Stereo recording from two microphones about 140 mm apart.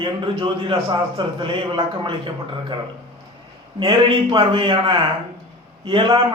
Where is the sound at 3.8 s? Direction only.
40° right (ahead or behind).